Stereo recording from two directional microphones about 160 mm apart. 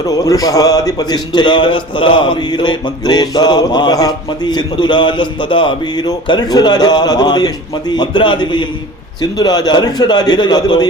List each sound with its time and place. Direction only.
0.1 s a man's voice: 20° left (ahead or behind)